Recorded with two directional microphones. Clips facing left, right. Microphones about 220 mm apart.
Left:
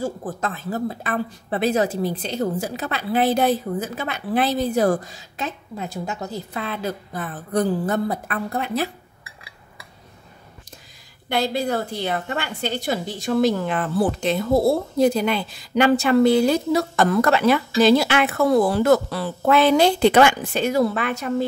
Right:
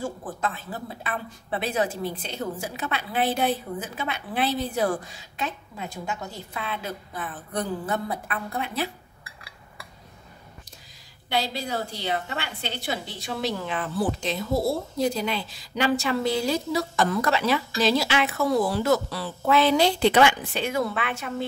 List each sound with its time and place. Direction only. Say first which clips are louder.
0.0 s speech: left 4 dB; 40° left (ahead or behind)
11.2 s a woman's voice: left 6 dB; 50° left (ahead or behind)